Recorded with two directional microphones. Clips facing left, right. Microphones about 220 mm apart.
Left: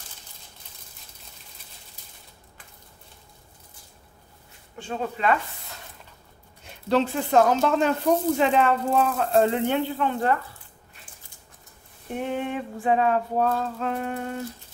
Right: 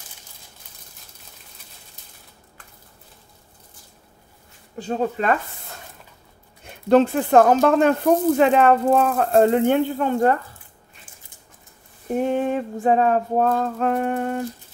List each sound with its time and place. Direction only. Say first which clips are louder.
4.7 s speech: right 7 dB; 40° right (ahead or behind)
12.1 s speech: right 7 dB; 40° right (ahead or behind)